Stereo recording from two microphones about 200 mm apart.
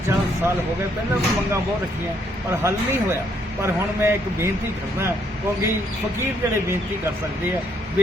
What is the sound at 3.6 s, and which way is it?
Speech, 15° right (ahead or behind).